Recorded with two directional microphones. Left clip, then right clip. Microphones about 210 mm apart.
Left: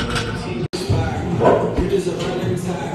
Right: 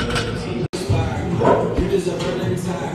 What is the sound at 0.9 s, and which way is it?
Bow-wow, centre (ahead or behind).